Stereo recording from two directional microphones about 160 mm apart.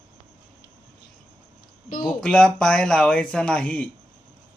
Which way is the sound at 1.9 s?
55° left (ahead or behind).